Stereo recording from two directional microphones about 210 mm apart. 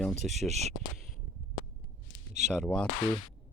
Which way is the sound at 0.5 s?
30° right (ahead or behind).